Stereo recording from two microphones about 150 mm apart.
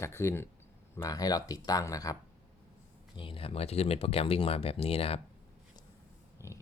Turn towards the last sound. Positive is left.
turn(degrees=20)  # may be behind; listen again after turning